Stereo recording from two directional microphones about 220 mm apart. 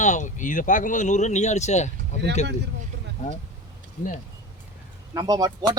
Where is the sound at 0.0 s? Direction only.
35° left (ahead or behind).